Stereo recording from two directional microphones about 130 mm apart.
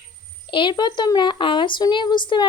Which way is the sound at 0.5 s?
35° left (ahead or behind).